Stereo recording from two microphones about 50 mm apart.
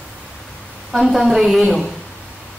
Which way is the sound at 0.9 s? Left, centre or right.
Centre.